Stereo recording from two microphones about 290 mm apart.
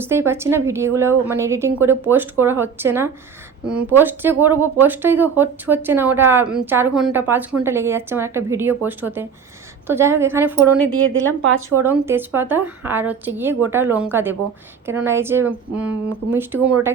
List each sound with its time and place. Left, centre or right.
0.0 s speech: centre
10.8 s speech: right
11.7 s speech: centre